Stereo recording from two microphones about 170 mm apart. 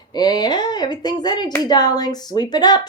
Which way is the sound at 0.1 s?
25° left (ahead or behind).